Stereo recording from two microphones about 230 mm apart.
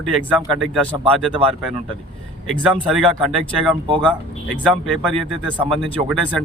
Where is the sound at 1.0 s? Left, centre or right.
Right.